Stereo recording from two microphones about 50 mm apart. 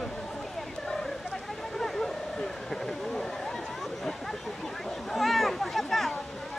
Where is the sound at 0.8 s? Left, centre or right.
Centre.